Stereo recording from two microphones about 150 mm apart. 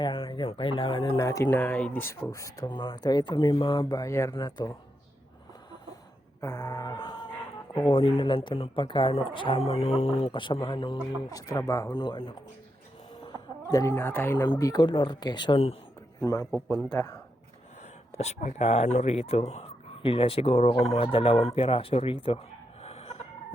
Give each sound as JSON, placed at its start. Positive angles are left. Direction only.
{"t": 0.0, "sound": "speech", "side_deg": 30}
{"t": 1.2, "sound": "speech", "side_deg": 20}
{"t": 6.4, "sound": "speech", "side_deg": 20}
{"t": 13.7, "sound": "speech", "side_deg": 20}
{"t": 14.6, "sound": "speech", "side_deg": 25}
{"t": 16.2, "sound": "speech", "side_deg": 20}
{"t": 18.1, "sound": "speech", "side_deg": 45}
{"t": 22.8, "sound": "chicken", "side_deg": 45}